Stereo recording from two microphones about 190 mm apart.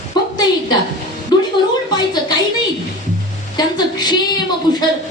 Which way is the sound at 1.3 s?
20° left (ahead or behind).